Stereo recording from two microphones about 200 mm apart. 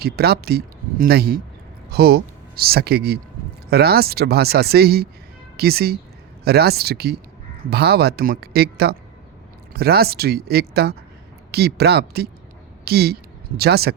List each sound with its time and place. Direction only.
0.0 s speech: 50° right (ahead or behind)